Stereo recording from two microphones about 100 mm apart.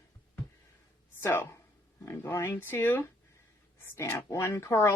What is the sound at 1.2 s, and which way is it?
Speech, 20° left (ahead or behind).